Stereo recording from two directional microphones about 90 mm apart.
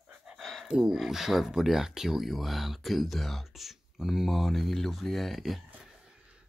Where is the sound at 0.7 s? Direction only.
5° right (ahead or behind).